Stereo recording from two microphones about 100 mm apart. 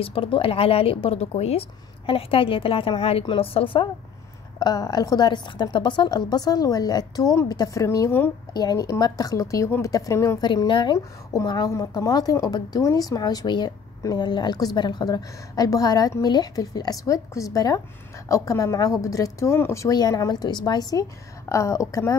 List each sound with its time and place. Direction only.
0.0 s a woman's voice: 65° left (ahead or behind)
4.6 s a woman's voice: 40° left (ahead or behind)
10.4 s a woman's voice: 50° left (ahead or behind); by 19.9 s 25° left (ahead or behind)
19.9 s a woman's voice: 40° left (ahead or behind)
21.5 s a woman's voice: 30° left (ahead or behind)